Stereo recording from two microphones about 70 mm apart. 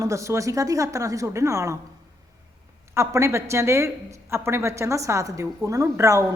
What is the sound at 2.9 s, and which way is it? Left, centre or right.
A woman's voice, right.